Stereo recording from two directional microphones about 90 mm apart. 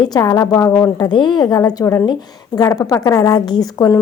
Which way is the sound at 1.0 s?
55° left (ahead or behind).